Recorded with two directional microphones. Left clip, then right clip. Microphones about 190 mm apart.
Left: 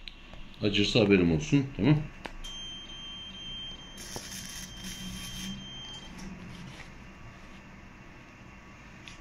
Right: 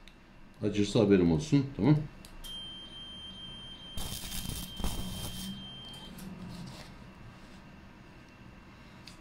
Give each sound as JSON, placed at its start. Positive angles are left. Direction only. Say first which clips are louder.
{"t": 0.7, "sound": "speech", "louder": "left 4 dB", "side_deg": -50}
{"t": 0.9, "sound": "speech", "louder": "even", "side_deg": -15}
{"t": 3.9, "sound": "vehicle", "louder": "even", "side_deg": -15}